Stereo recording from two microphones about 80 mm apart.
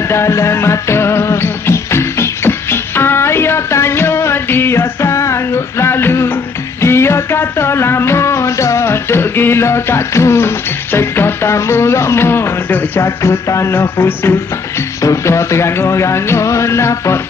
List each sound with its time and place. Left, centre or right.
0.1 s music: left
13.0 s music: left